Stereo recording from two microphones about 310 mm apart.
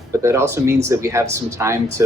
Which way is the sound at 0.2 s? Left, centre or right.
Centre.